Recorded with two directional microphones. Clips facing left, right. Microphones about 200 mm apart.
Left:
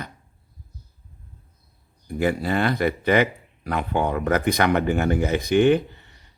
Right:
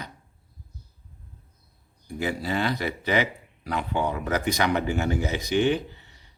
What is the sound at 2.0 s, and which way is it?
Speech, 55° left (ahead or behind).